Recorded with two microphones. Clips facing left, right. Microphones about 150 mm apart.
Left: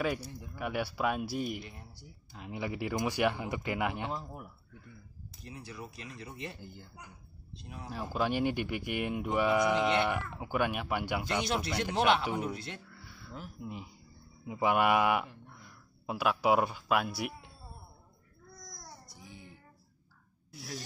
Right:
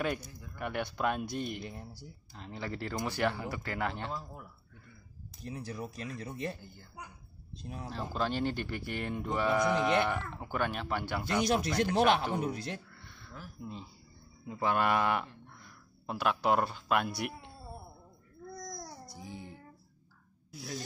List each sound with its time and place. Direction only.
0.2 s a man's voice: 30° left (ahead or behind)
0.6 s speech: 5° left (ahead or behind)
1.6 s speech: 35° right (ahead or behind)
2.3 s speech: 10° left (ahead or behind)
5.4 s speech: 40° right (ahead or behind)
7.8 s speech: 10° left (ahead or behind)
11.4 s a man's voice: 40° right (ahead or behind)
12.9 s a sound: 5° left (ahead or behind)
13.6 s speech: 15° left (ahead or behind)